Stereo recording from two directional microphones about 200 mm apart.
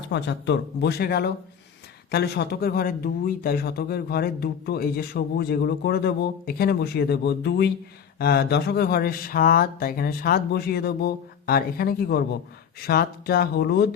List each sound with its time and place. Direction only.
0.1 s speech: 60° left (ahead or behind)